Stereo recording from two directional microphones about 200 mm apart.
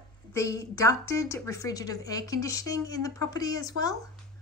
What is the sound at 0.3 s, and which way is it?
A woman's voice, 15° left (ahead or behind).